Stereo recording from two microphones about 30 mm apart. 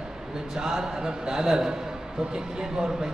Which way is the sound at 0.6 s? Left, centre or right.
Centre.